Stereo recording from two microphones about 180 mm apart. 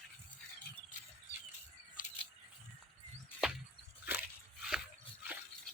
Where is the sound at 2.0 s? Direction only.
50° left (ahead or behind).